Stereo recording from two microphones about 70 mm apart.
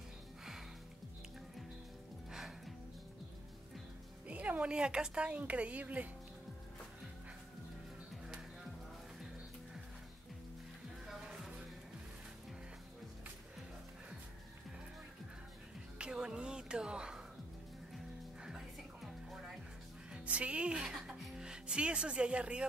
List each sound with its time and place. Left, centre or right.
4.3 s a woman's voice: centre
11.1 s music: centre
16.0 s music: centre
20.1 s music: centre